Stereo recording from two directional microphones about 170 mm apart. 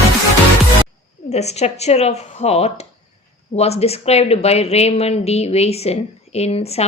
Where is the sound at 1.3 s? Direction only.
40° left (ahead or behind).